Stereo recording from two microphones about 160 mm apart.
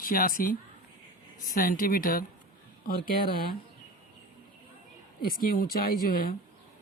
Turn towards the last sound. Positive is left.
turn(degrees=65)  # may be behind; listen again after turning